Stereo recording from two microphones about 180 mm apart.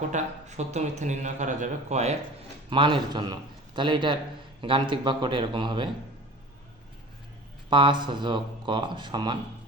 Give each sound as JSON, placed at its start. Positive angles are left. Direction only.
{"t": 0.1, "sound": "speech", "side_deg": -40}
{"t": 2.6, "sound": "speech", "side_deg": -25}
{"t": 7.7, "sound": "speech", "side_deg": -25}